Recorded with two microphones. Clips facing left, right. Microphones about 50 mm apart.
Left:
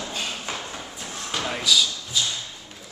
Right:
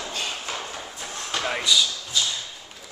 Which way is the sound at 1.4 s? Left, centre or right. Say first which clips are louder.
Right 2 dB; centre.